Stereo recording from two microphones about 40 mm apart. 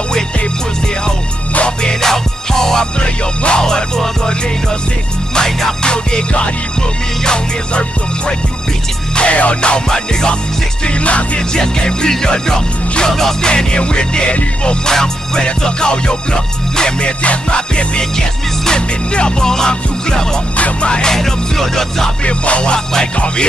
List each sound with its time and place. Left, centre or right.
1.8 s music: centre
3.0 s music: left
3.6 s music: centre
5.3 s music: centre
9.1 s music: left
11.1 s music: left
11.5 s music: centre
13.5 s music: left
14.9 s music: centre
20.5 s music: left
20.9 s music: centre
22.2 s music: left